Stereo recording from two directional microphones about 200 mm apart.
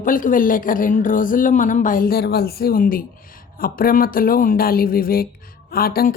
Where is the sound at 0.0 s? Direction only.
40° left (ahead or behind).